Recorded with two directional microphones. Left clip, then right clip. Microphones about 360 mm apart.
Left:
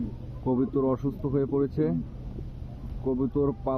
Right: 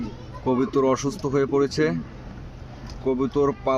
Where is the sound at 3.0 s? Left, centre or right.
Centre.